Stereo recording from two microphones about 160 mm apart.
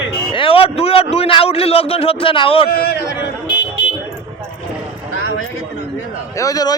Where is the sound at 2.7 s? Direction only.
80° left.